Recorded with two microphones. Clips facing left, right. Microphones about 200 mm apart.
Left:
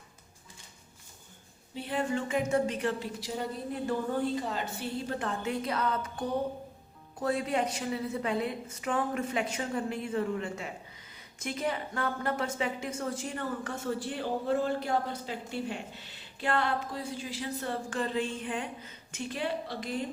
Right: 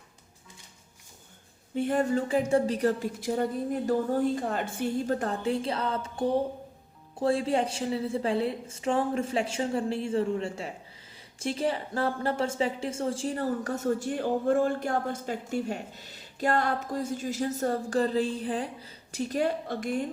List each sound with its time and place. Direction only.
1.7 s a woman's voice: 50° right (ahead or behind)